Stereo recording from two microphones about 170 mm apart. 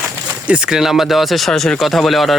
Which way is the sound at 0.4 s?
5° right (ahead or behind).